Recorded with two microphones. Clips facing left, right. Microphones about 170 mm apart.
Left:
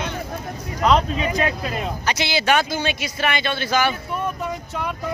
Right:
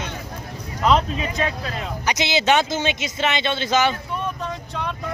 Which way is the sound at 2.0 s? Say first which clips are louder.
Right 2 dB; 20° right (ahead or behind).